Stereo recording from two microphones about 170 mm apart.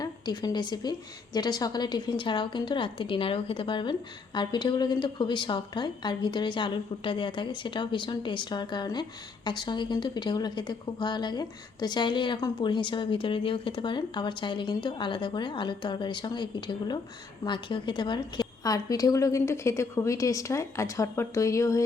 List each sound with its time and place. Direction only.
0.0 s a woman's voice: 25° left (ahead or behind)